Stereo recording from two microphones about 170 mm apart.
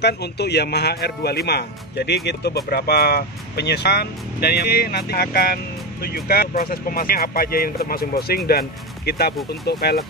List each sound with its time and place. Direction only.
0.0 s speech: 80° left